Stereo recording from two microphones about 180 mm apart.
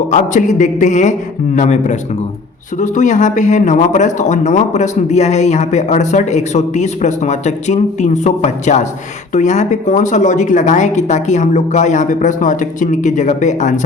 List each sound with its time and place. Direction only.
0.1 s a woman's voice: 45° left (ahead or behind)